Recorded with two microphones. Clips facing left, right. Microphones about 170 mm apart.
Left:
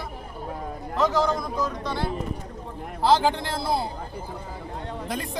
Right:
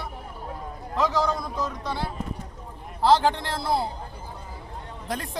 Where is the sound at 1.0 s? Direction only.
Centre (ahead or behind).